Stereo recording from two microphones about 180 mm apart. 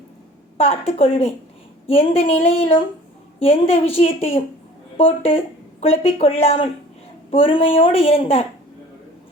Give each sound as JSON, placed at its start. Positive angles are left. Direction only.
{"t": 0.5, "sound": "speech", "side_deg": 35}